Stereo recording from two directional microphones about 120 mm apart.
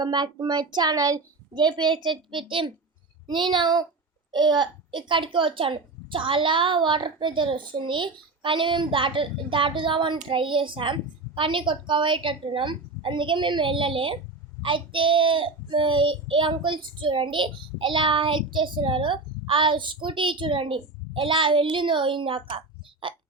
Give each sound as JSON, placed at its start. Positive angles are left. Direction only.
{"t": 0.0, "sound": "a woman's voice", "side_deg": -35}